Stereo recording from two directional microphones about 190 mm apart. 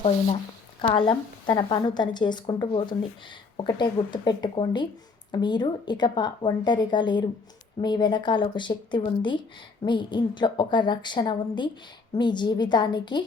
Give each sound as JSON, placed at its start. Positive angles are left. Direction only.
{"t": 0.8, "sound": "a woman's voice", "side_deg": 25}